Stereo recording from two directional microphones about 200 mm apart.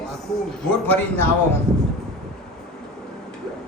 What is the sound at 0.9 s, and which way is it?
Speech, 10° left (ahead or behind).